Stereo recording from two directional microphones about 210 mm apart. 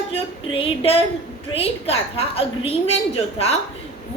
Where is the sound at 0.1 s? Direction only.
25° left (ahead or behind).